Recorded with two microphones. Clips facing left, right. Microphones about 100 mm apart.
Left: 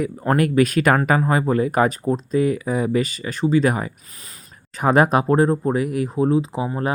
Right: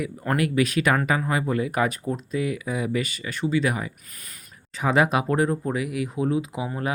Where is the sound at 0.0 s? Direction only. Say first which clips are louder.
Left 5 dB; 40° left (ahead or behind).